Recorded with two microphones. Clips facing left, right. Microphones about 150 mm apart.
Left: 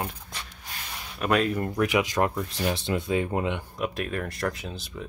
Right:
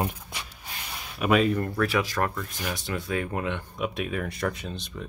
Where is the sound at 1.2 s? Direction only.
Centre (ahead or behind).